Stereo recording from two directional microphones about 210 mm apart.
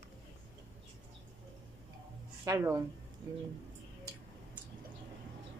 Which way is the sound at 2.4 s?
15° right (ahead or behind).